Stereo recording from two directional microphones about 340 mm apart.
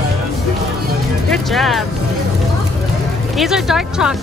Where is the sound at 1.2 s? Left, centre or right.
Centre.